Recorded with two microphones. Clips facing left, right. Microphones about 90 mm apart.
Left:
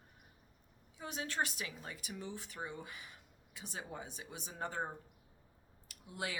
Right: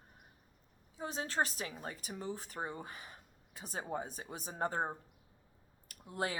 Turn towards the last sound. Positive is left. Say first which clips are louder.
# right 5 dB
turn(degrees=-40)  # may be behind; listen again after turning